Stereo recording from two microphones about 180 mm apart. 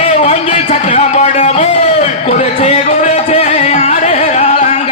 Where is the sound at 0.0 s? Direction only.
40° left (ahead or behind).